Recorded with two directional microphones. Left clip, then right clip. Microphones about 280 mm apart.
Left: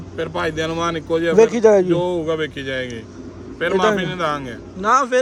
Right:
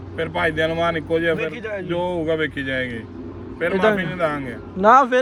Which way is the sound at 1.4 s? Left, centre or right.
Centre.